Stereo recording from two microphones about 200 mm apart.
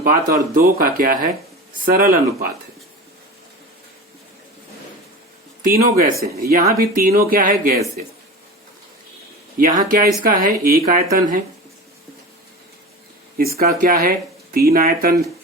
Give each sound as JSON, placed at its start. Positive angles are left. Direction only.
{"t": 0.5, "sound": "speech", "side_deg": -45}
{"t": 5.7, "sound": "speech", "side_deg": -45}
{"t": 9.6, "sound": "speech", "side_deg": -45}
{"t": 13.3, "sound": "speech", "side_deg": -50}